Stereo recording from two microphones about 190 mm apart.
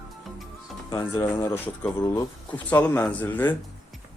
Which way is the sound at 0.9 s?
20° left (ahead or behind).